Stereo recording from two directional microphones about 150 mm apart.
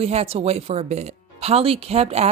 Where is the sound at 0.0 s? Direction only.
45° right (ahead or behind).